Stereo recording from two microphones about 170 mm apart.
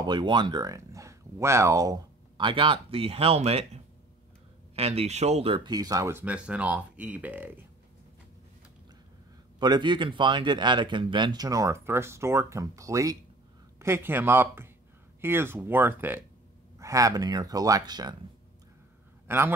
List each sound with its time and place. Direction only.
0.0 s speech: 25° right (ahead or behind)
9.6 s speech: 25° right (ahead or behind)
19.2 s a man's voice: 15° right (ahead or behind)